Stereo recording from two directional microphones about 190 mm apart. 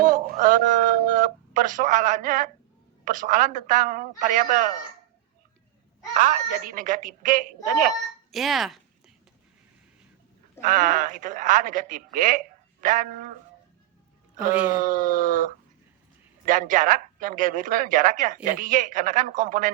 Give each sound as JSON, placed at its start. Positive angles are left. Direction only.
{"t": 0.0, "sound": "speech", "side_deg": -45}
{"t": 6.1, "sound": "speech", "side_deg": -45}
{"t": 8.3, "sound": "speech", "side_deg": 0}
{"t": 10.6, "sound": "speech", "side_deg": -45}
{"t": 14.8, "sound": "speech", "side_deg": -45}